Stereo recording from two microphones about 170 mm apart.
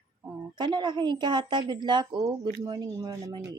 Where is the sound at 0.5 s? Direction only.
25° right (ahead or behind).